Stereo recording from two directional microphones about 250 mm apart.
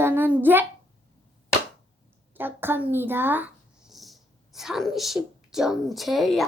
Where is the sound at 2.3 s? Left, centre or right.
Centre.